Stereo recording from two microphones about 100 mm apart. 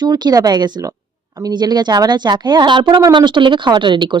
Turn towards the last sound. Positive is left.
turn(degrees=-50)  # may be behind; listen again after turning